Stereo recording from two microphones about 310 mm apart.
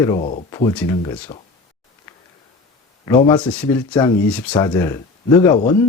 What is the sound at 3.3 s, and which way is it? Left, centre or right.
Speech, centre.